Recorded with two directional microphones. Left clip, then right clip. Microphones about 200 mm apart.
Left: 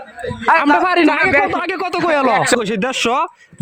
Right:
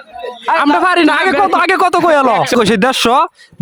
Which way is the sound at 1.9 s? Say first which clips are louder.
Right 5 dB; 20° right (ahead or behind).